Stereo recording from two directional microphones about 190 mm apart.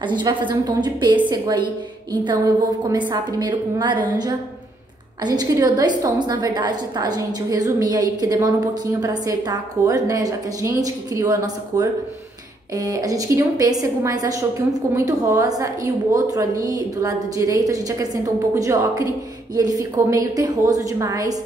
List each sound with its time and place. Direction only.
0.0 s a woman's voice: 25° right (ahead or behind)
5.2 s a woman's voice: 20° right (ahead or behind)